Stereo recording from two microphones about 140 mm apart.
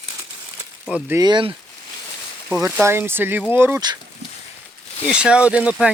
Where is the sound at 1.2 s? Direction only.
35° right (ahead or behind).